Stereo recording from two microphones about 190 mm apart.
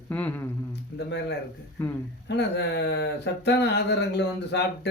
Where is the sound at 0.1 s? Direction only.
10° left (ahead or behind).